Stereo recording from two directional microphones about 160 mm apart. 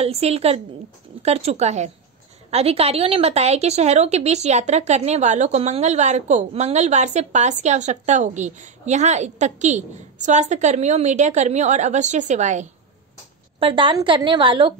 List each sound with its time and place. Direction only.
0.0 s a woman's voice: 40° right (ahead or behind)
13.6 s a woman's voice: 30° right (ahead or behind)